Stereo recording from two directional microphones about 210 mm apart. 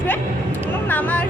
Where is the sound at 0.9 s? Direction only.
5° left (ahead or behind).